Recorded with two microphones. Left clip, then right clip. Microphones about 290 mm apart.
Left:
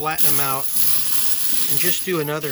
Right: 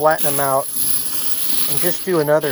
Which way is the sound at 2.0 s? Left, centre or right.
Centre.